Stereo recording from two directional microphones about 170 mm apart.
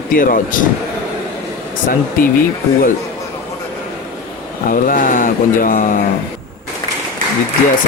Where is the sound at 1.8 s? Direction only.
55° left (ahead or behind).